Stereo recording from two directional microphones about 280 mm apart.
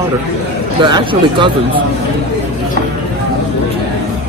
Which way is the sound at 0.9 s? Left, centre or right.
Centre.